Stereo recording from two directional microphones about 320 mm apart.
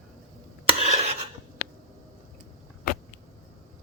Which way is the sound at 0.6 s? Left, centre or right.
Centre.